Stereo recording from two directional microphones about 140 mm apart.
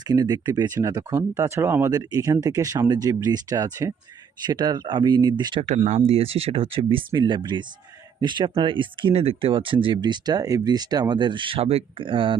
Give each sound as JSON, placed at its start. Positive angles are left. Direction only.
{"t": 0.1, "sound": "speech", "side_deg": -30}
{"t": 5.6, "sound": "speech", "side_deg": -55}
{"t": 6.0, "sound": "speech", "side_deg": -45}